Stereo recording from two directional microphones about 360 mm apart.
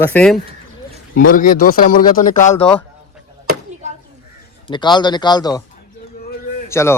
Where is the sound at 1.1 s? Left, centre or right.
Left.